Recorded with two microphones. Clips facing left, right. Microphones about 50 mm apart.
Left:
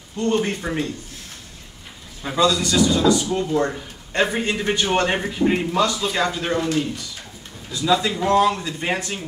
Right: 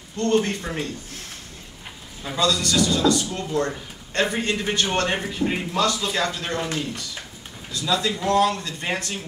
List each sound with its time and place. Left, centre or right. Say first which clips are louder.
0.2 s speech: even; centre
2.2 s speech: left 4 dB; centre
7.7 s speech: left 4 dB; centre